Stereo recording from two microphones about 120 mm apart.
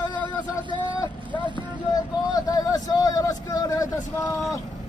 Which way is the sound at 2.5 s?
30° left (ahead or behind).